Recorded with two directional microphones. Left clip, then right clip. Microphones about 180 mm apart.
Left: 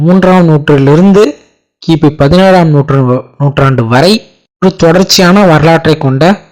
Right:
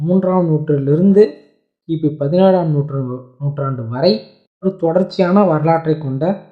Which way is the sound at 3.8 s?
45° left (ahead or behind).